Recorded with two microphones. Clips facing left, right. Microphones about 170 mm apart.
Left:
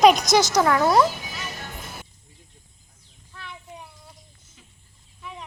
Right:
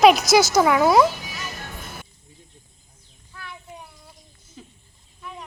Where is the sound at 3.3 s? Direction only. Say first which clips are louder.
Right 1 dB; centre (ahead or behind).